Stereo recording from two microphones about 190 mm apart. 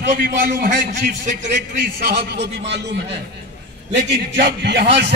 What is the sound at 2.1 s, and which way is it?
A man's voice, 60° right (ahead or behind).